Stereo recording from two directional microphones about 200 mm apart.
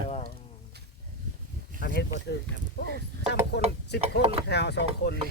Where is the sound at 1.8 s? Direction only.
55° left (ahead or behind).